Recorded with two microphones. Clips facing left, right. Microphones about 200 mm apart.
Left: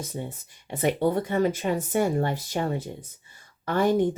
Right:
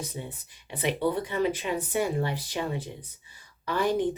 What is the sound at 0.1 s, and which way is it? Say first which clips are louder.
Speech: left 4 dB; 45° left (ahead or behind).